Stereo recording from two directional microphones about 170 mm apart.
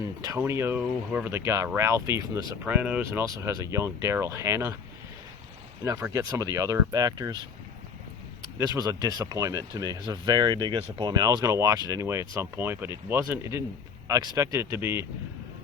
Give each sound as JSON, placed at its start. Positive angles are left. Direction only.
{"t": 0.0, "sound": "speech", "side_deg": -15}
{"t": 3.2, "sound": "speech", "side_deg": -20}
{"t": 5.8, "sound": "speech", "side_deg": -20}
{"t": 8.5, "sound": "speech", "side_deg": -20}